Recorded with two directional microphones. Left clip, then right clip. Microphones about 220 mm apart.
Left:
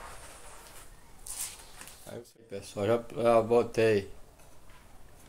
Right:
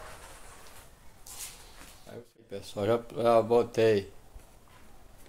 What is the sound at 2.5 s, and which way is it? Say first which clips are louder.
Speech: even; 5° right (ahead or behind).